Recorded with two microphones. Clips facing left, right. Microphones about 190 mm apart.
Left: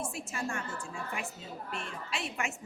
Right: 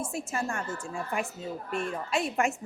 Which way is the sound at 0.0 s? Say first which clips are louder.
Right 4 dB; 45° right (ahead or behind).